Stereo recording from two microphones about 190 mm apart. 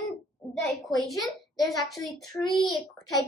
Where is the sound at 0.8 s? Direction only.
Centre (ahead or behind).